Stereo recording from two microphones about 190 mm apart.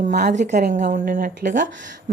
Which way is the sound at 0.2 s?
40° right (ahead or behind).